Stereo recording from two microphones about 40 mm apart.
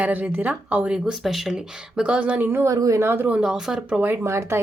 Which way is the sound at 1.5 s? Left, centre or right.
Right.